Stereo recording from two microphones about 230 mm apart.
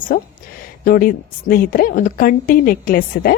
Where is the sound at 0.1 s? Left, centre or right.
Left.